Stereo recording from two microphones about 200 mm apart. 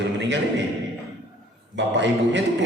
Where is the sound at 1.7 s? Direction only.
60° right (ahead or behind).